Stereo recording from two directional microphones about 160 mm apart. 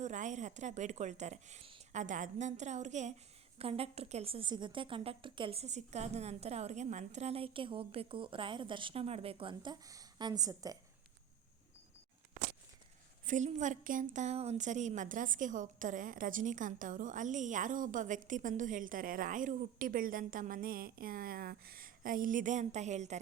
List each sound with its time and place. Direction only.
0.0 s a woman's voice: 50° right (ahead or behind)
2.0 s a woman's voice: 50° right (ahead or behind); by 10.8 s 20° right (ahead or behind)
13.2 s a woman's voice: 50° right (ahead or behind)